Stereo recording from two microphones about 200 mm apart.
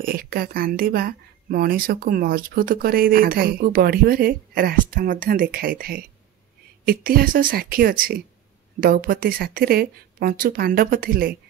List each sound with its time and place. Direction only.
0.0 s speech: 50° right (ahead or behind)